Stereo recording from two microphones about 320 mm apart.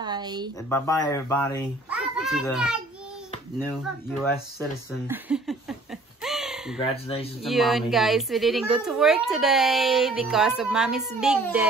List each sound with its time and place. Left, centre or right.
0.0 s a sound: centre
0.7 s speech: centre
1.9 s a sound: centre
2.5 s a child's voice: centre
4.6 s speech: centre
6.2 s owl: centre
6.8 s speech: centre
7.4 s a child's voice: centre